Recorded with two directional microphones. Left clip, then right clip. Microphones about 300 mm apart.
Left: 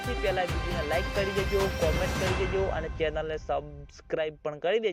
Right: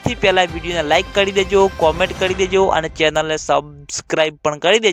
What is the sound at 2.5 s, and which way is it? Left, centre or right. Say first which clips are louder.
Speech: right 15 dB; right.